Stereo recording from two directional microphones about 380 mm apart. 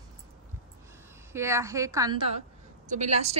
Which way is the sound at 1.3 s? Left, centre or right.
Centre.